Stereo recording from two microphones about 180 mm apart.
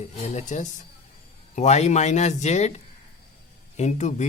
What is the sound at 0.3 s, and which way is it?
A man's voice, 40° left (ahead or behind).